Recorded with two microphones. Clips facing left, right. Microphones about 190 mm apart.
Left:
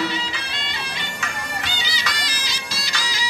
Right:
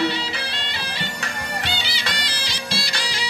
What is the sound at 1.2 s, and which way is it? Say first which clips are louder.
Bagpipes: right 1 dB; 30° right (ahead or behind).